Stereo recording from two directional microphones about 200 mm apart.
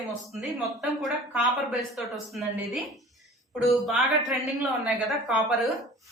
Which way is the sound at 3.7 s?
Centre (ahead or behind).